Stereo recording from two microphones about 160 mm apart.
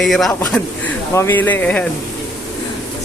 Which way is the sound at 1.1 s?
15° left (ahead or behind).